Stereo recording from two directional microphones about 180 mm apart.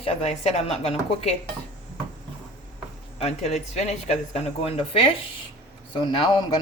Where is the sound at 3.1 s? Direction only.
35° left (ahead or behind).